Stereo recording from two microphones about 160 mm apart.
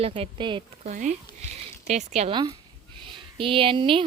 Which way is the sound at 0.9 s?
50° right (ahead or behind).